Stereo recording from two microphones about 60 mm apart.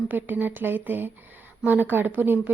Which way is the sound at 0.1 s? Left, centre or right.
Right.